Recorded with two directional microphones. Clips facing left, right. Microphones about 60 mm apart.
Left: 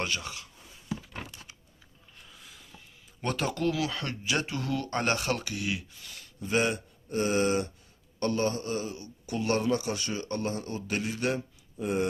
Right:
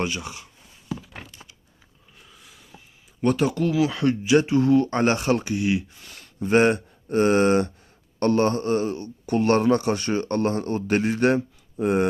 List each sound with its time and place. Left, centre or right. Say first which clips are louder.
0.0 s speech: right 5 dB; centre
2.1 s a sound: right 1 dB; centre
3.2 s speech: right 9 dB; centre
3.8 s speech: right 11 dB; centre
6.2 s a man's voice: right 9 dB; right